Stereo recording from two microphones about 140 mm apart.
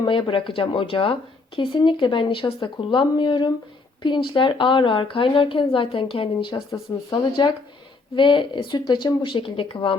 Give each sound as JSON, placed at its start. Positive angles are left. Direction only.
{"t": 0.0, "sound": "a woman's voice", "side_deg": 35}